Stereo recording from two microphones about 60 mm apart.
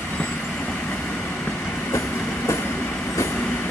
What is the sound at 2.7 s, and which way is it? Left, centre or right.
Train, left.